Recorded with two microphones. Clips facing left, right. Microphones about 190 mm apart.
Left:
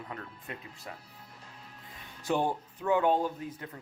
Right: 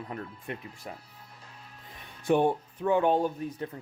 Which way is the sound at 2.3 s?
25° right (ahead or behind).